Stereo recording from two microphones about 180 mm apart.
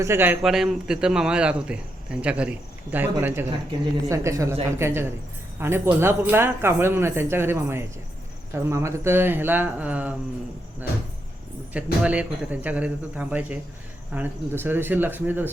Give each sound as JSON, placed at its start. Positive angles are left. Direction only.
{"t": 0.0, "sound": "a man's voice", "side_deg": -10}
{"t": 11.7, "sound": "a man's voice", "side_deg": -5}